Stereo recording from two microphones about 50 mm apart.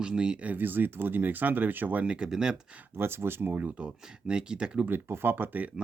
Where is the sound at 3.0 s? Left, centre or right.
Right.